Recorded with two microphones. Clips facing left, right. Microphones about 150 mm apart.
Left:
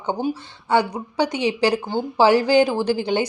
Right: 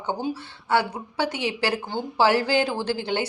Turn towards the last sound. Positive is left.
turn(degrees=15)  # may be behind; listen again after turning